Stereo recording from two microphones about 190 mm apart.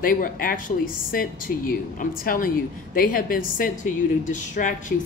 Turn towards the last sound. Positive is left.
turn(degrees=40)  # may be behind; listen again after turning